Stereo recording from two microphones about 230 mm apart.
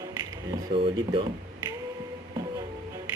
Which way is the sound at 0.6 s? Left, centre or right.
Right.